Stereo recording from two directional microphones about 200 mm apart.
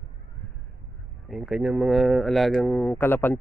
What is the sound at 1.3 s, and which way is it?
Speech, centre (ahead or behind).